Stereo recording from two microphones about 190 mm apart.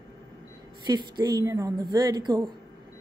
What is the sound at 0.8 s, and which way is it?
A woman's voice, 20° right (ahead or behind).